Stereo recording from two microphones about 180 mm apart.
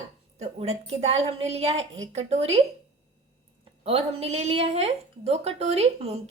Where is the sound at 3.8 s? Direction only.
35° right (ahead or behind).